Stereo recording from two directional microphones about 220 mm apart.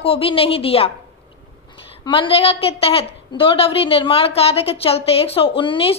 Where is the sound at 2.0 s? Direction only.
20° left (ahead or behind).